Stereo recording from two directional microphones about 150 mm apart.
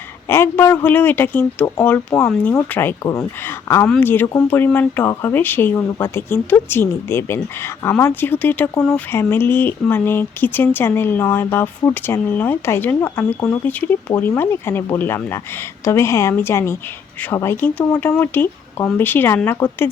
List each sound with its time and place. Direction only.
0.3 s speech: 15° left (ahead or behind)